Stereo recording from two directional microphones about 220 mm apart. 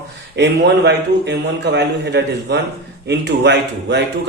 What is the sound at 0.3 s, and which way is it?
A man's voice, 50° right (ahead or behind).